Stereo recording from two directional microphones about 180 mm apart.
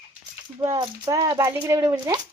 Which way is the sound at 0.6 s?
20° right (ahead or behind).